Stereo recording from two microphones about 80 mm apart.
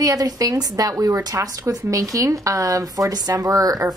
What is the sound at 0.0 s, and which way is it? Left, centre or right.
A woman's voice, right.